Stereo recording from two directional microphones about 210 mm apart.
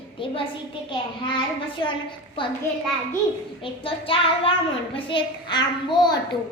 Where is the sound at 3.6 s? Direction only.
25° left (ahead or behind).